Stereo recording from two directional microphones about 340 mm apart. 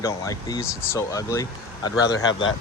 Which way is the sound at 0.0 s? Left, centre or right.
Centre.